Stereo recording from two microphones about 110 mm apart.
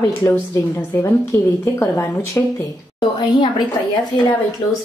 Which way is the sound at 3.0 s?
40° left (ahead or behind).